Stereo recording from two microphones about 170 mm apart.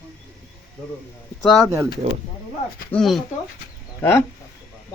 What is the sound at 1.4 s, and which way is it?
Speech, centre (ahead or behind).